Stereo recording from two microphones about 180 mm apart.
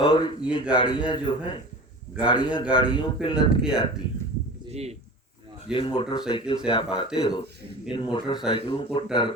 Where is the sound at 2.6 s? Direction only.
5° right (ahead or behind).